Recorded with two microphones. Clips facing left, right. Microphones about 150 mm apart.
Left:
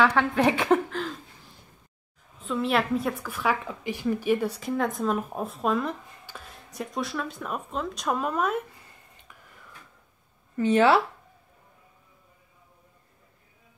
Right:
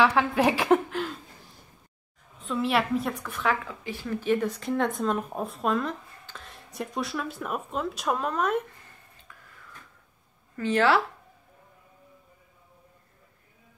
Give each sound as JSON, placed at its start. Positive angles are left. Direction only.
{"t": 0.0, "sound": "speech", "side_deg": 0}
{"t": 2.4, "sound": "speech", "side_deg": 0}
{"t": 3.6, "sound": "speech", "side_deg": 15}
{"t": 10.5, "sound": "speech", "side_deg": 20}